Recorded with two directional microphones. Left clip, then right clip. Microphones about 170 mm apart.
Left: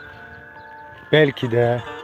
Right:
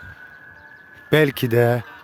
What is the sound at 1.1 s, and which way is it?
Speech, 40° right (ahead or behind).